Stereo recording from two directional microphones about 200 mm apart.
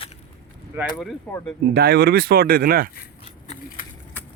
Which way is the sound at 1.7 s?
50° right (ahead or behind).